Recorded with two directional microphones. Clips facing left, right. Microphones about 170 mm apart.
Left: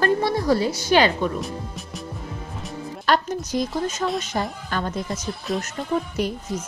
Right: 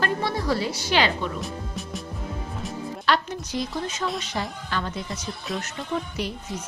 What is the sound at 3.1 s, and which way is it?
A woman's voice, 45° left (ahead or behind).